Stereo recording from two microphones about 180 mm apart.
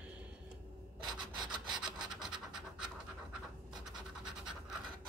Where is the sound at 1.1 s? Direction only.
25° right (ahead or behind).